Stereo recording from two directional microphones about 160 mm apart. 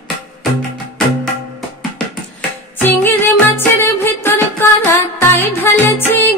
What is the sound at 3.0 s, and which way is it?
Music, 15° left (ahead or behind).